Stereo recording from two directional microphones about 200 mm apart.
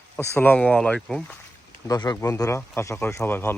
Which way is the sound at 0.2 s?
10° left (ahead or behind).